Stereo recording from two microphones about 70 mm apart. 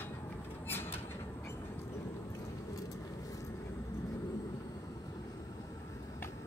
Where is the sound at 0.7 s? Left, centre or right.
Left.